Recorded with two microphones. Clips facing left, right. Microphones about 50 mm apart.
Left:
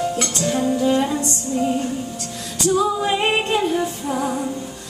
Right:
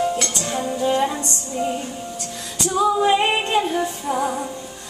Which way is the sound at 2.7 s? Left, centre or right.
Centre.